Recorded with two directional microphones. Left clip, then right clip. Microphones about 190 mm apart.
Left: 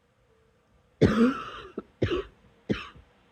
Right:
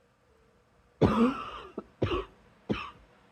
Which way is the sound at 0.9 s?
90° left.